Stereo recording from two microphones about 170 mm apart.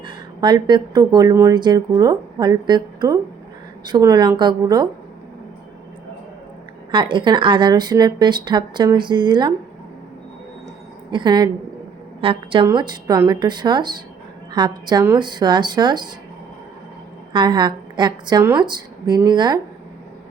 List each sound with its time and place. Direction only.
0.0 s speech: 25° right (ahead or behind)
6.9 s speech: 30° right (ahead or behind)
11.1 s a woman's voice: 25° right (ahead or behind)
17.3 s speech: 25° right (ahead or behind)